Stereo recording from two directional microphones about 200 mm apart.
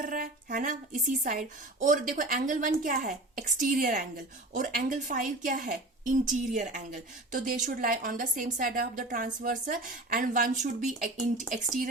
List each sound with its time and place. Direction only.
0.0 s a woman's voice: 40° right (ahead or behind)